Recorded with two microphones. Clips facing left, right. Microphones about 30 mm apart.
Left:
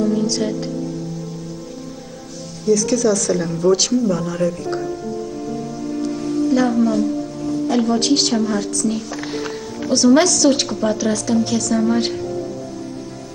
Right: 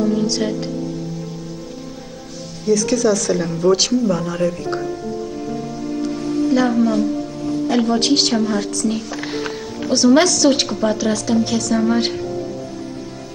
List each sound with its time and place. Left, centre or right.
0.0 s music: centre
2.6 s speech: centre